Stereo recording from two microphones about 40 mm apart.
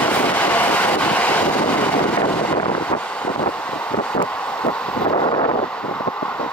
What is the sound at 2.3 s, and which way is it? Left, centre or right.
Vehicle, left.